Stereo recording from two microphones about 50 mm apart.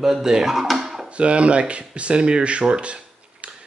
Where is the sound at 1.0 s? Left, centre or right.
Right.